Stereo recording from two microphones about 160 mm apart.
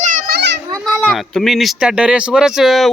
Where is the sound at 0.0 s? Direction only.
55° right (ahead or behind); by 0.6 s 90° right.